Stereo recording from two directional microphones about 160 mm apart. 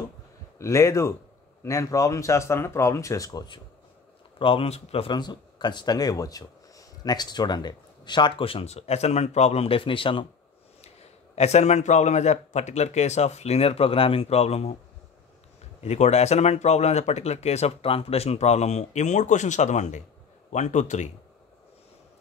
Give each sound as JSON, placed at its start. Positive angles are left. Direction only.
{"t": 0.6, "sound": "a man's voice", "side_deg": 20}
{"t": 11.3, "sound": "speech", "side_deg": 45}
{"t": 15.8, "sound": "speech", "side_deg": 45}